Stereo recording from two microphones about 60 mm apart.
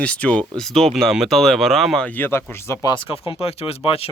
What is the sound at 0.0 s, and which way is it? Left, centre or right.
Speech, centre.